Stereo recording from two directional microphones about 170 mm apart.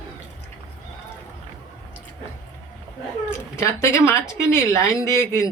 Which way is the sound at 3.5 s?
15° left (ahead or behind).